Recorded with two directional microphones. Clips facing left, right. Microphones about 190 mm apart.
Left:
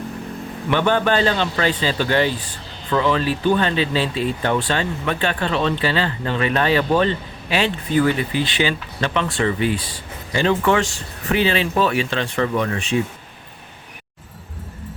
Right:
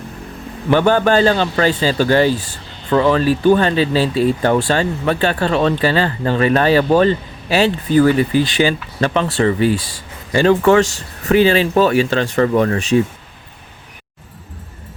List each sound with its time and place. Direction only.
0.7 s speech: 40° right (ahead or behind)